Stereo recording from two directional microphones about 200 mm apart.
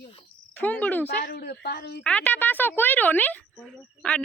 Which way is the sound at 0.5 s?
5° left (ahead or behind).